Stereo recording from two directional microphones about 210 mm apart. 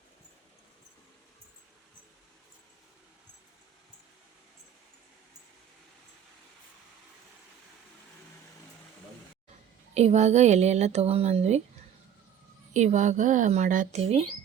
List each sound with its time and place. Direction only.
9.9 s speech: 30° right (ahead or behind)
12.7 s speech: 35° right (ahead or behind)